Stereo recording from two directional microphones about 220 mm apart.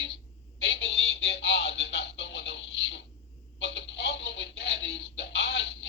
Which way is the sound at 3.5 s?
55° left (ahead or behind).